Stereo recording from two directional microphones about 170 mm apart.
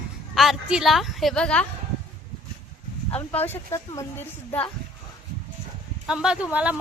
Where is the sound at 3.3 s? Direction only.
10° left (ahead or behind).